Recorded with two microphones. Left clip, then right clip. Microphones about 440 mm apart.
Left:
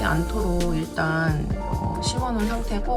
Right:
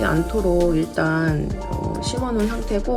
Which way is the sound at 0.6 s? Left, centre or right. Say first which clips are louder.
Right 6 dB; centre.